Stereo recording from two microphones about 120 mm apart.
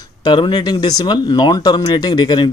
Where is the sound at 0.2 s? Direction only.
40° left (ahead or behind).